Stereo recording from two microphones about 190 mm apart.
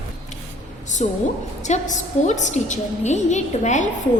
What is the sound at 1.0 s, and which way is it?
A woman's voice, 40° left (ahead or behind).